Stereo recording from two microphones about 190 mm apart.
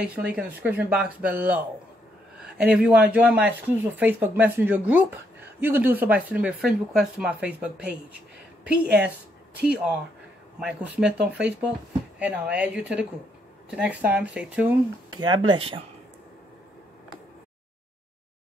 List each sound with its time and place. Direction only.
0.0 s speech: 5° right (ahead or behind)
15.1 s speech: 25° right (ahead or behind)